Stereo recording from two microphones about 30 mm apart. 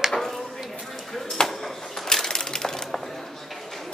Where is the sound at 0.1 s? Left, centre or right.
Centre.